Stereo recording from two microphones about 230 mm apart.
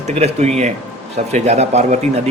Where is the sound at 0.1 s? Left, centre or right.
Right.